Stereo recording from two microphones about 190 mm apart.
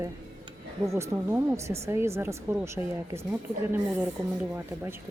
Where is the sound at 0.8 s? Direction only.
15° right (ahead or behind).